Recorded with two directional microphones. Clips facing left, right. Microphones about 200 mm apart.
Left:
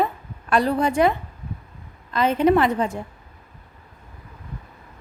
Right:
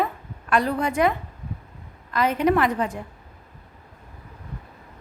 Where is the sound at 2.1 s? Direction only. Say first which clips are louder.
Left 3 dB; 25° left (ahead or behind).